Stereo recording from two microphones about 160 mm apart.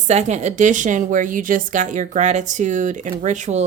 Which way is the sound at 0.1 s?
45° right (ahead or behind).